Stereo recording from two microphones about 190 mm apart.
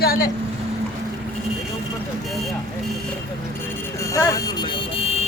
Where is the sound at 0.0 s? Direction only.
50° left (ahead or behind).